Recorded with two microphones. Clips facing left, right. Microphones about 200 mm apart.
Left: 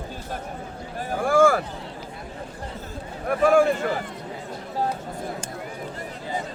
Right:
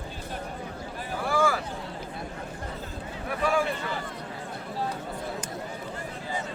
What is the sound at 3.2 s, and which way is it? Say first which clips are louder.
Speech: left 9 dB; 50° left (ahead or behind).